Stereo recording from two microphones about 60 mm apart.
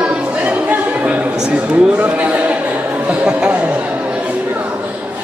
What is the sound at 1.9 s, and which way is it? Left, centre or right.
A man's voice, right.